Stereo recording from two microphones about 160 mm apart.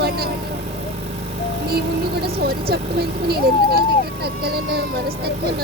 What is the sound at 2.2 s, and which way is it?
Speech, 80° right.